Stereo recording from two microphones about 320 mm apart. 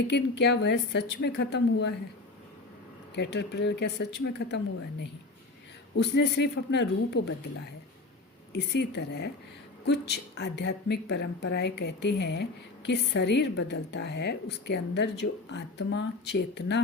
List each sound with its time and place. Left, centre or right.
0.1 s a woman's voice: left
3.2 s a woman's voice: left
8.5 s a woman's voice: left